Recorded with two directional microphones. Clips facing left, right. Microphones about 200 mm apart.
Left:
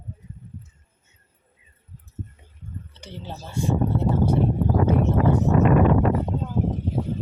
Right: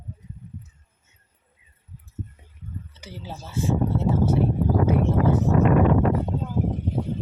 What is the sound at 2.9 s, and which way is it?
Speech, 5° right (ahead or behind).